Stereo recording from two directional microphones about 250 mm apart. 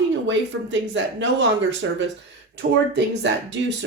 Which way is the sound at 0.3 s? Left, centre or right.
Right.